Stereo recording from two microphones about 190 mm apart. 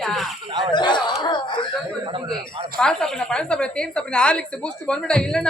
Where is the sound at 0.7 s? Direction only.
25° left (ahead or behind).